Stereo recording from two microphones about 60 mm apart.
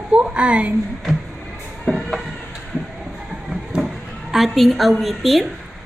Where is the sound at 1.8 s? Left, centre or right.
Centre.